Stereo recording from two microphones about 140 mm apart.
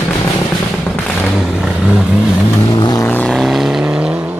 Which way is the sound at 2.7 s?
30° left (ahead or behind).